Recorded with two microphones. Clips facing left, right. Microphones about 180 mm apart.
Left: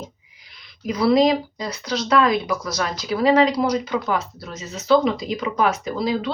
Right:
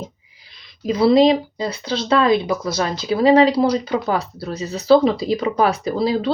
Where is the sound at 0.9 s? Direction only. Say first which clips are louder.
Right 3 dB; 25° right (ahead or behind).